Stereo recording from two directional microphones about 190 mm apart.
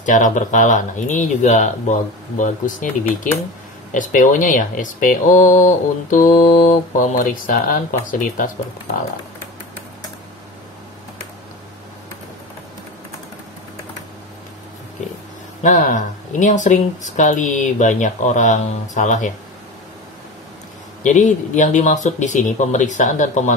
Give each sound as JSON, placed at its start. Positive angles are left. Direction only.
{"t": 0.0, "sound": "speech", "side_deg": 40}
{"t": 3.9, "sound": "speech", "side_deg": 45}
{"t": 15.6, "sound": "speech", "side_deg": 40}
{"t": 21.0, "sound": "speech", "side_deg": 40}